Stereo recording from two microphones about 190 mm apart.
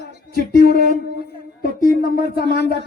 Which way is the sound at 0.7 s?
45° right (ahead or behind).